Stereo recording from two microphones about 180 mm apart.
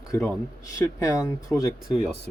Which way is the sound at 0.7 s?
15° left (ahead or behind).